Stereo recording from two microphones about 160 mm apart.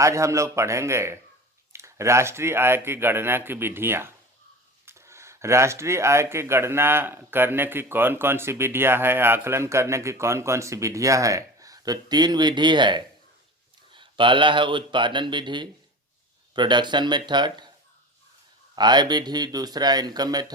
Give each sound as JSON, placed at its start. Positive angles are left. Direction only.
{"t": 0.0, "sound": "speech", "side_deg": -20}
{"t": 18.8, "sound": "speech", "side_deg": -25}